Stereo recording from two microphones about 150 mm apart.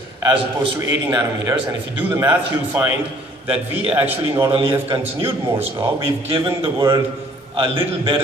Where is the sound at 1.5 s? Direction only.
10° right (ahead or behind).